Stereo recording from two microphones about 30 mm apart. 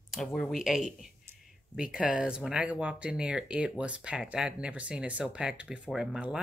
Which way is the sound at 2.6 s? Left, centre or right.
Right.